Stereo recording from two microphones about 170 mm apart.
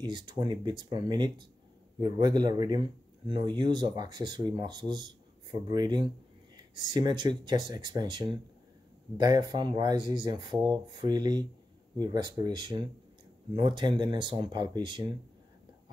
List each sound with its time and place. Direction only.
0.0 s speech: 25° right (ahead or behind)